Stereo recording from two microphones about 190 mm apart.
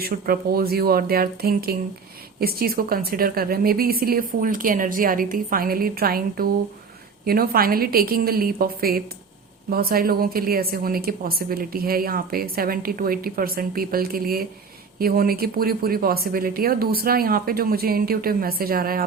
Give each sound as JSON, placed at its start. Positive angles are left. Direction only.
{"t": 0.0, "sound": "a woman's voice", "side_deg": -55}